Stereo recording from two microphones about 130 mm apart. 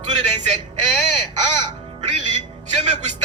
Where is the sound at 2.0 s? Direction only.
65° right (ahead or behind).